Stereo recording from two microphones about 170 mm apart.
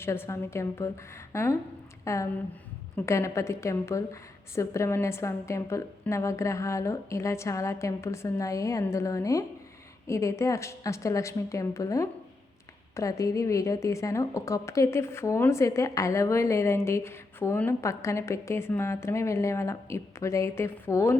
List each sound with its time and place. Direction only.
0.0 s a woman's voice: 15° left (ahead or behind)